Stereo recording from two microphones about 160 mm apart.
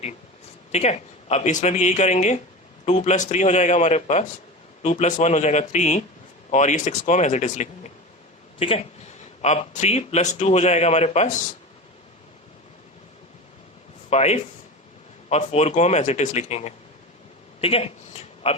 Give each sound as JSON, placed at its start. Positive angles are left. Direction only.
{"t": 0.7, "sound": "a man's voice", "side_deg": 45}
{"t": 8.5, "sound": "a man's voice", "side_deg": 35}
{"t": 14.1, "sound": "a man's voice", "side_deg": 45}
{"t": 17.6, "sound": "a sound", "side_deg": 35}